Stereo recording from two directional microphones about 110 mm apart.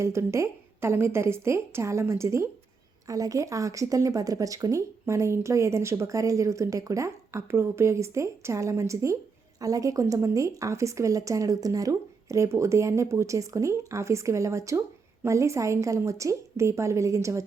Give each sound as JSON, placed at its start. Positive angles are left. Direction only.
{"t": 0.0, "sound": "speech", "side_deg": -25}